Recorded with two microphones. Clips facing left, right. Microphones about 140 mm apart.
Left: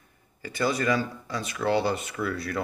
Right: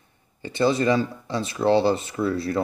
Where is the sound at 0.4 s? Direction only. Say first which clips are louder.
Right 6 dB; 25° right (ahead or behind).